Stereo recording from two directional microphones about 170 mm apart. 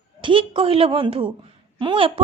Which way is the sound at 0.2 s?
30° right (ahead or behind).